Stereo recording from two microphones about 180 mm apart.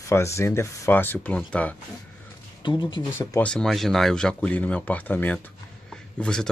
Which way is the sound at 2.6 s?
25° left (ahead or behind).